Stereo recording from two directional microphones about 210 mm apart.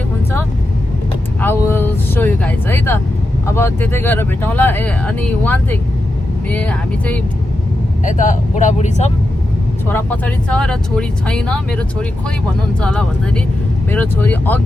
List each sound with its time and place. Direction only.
1.4 s vehicle: 10° left (ahead or behind)
3.4 s speech: 10° left (ahead or behind)
8.0 s speech: 40° left (ahead or behind)
9.9 s speech: 5° left (ahead or behind)